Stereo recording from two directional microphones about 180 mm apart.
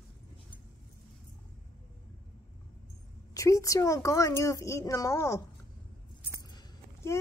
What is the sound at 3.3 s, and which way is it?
A woman's voice, 20° left (ahead or behind).